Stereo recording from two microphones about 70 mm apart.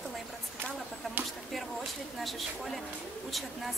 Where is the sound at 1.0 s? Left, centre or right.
Centre.